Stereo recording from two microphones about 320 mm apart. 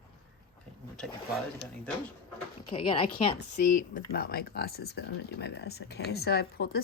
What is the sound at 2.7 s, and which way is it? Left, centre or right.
Speech, centre.